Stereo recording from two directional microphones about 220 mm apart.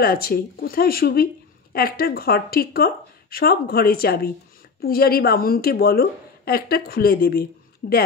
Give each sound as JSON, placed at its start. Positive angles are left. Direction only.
{"t": 0.0, "sound": "speech", "side_deg": 45}